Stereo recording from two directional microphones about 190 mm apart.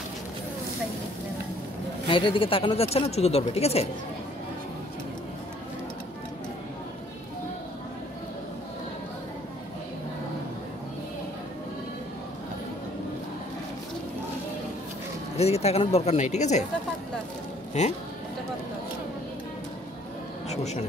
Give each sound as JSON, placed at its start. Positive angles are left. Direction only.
{"t": 2.0, "sound": "speech", "side_deg": 25}
{"t": 15.3, "sound": "speech", "side_deg": 35}
{"t": 20.4, "sound": "a man's voice", "side_deg": 35}